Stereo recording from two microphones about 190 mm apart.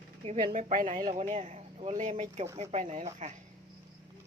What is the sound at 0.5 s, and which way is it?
Speech, 45° right (ahead or behind).